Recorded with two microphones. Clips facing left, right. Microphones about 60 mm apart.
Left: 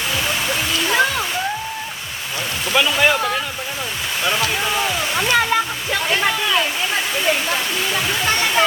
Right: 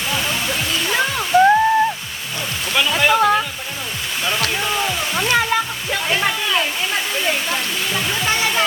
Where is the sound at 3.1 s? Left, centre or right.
Centre.